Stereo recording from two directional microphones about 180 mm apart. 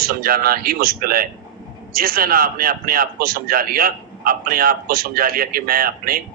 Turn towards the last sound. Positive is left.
turn(degrees=-55)  # may be behind; listen again after turning